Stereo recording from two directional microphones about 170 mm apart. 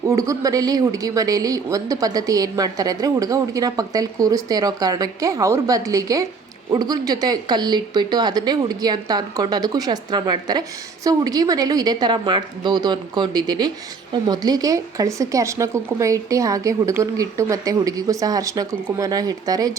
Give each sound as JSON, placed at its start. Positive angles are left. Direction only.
{"t": 0.0, "sound": "speech", "side_deg": -20}